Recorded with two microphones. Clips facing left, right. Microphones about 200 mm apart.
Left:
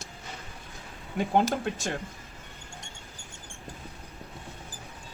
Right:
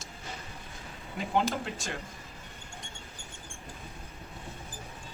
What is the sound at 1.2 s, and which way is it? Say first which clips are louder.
Speech: left 4 dB; 55° left (ahead or behind).